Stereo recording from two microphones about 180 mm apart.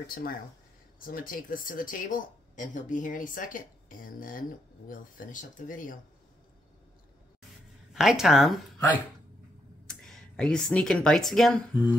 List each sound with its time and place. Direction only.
0.0 s speech: 55° left (ahead or behind)
7.9 s speech: centre (ahead or behind)
9.8 s speech: 5° left (ahead or behind)